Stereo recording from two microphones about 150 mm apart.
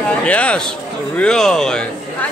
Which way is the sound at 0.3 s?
10° left (ahead or behind).